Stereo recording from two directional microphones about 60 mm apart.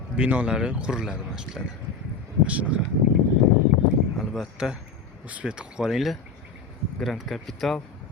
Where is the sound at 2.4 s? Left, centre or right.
Right.